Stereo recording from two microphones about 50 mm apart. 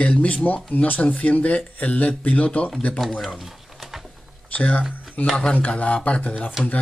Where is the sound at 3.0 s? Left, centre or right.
Centre.